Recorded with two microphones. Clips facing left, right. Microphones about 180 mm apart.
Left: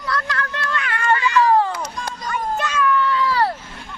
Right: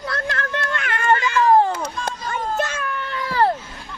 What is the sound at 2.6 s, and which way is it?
Children playing, 45° right (ahead or behind).